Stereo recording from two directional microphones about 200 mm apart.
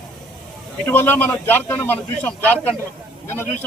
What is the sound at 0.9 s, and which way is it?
A man's voice, 10° left (ahead or behind).